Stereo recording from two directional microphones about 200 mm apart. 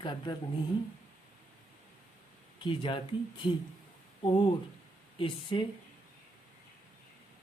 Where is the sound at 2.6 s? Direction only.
25° left (ahead or behind).